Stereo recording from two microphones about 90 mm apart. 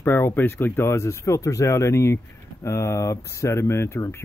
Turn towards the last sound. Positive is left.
turn(degrees=30)  # may be behind; listen again after turning